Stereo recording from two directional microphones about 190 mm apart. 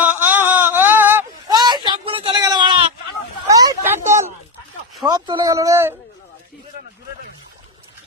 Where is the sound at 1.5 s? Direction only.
20° right (ahead or behind).